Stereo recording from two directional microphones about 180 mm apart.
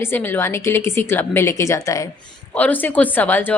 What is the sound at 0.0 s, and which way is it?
A woman's voice, 10° left (ahead or behind).